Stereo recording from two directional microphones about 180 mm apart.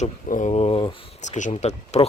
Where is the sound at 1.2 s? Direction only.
40° left (ahead or behind).